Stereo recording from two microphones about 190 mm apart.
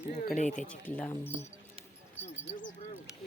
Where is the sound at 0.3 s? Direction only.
40° left (ahead or behind).